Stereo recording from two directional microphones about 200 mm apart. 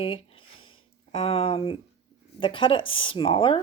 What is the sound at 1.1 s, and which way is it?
Speech, 30° left (ahead or behind).